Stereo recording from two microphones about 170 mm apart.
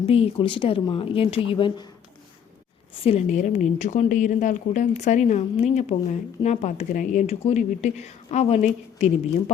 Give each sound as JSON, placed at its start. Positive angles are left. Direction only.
{"t": 0.0, "sound": "a woman's voice", "side_deg": 35}
{"t": 3.0, "sound": "a woman's voice", "side_deg": 35}